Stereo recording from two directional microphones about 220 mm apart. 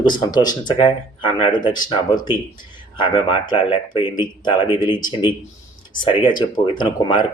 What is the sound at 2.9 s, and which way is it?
Speech, 20° left (ahead or behind).